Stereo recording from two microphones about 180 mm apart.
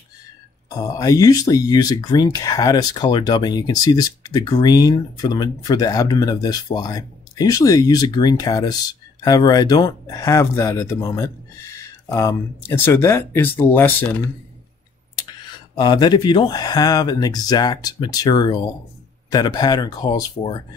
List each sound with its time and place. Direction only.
0.7 s speech: 20° left (ahead or behind)
15.7 s speech: 25° left (ahead or behind)